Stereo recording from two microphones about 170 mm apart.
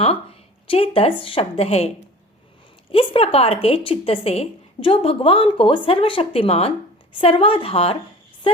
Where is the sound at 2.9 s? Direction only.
35° left (ahead or behind).